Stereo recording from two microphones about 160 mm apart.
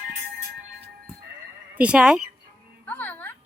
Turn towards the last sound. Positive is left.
turn(degrees=10)  # may be behind; listen again after turning